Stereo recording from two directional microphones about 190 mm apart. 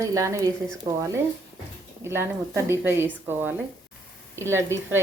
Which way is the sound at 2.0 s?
15° right (ahead or behind).